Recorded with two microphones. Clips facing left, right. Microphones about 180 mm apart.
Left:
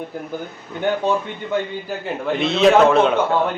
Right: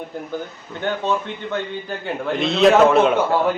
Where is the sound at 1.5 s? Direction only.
5° left (ahead or behind).